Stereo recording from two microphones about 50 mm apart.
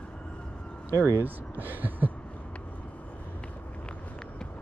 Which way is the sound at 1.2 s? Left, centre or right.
Right.